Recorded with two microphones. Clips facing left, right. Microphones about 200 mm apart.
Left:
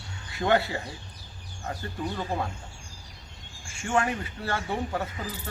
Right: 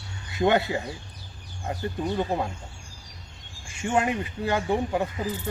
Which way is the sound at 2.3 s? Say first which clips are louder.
Right 3 dB; 20° right (ahead or behind).